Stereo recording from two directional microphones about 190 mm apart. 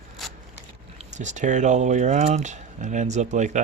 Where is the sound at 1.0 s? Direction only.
40° right (ahead or behind).